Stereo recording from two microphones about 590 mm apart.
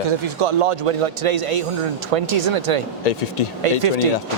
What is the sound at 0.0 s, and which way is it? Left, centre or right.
A man's voice, right.